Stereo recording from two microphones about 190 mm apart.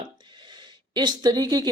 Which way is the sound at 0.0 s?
25° right (ahead or behind).